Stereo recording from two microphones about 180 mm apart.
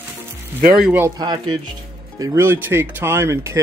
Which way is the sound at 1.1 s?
25° right (ahead or behind).